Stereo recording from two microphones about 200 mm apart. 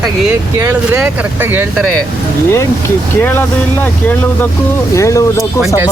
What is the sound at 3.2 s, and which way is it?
Speech, 10° left (ahead or behind).